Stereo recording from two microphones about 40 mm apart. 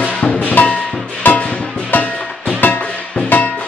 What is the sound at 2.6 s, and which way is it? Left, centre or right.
Music, left.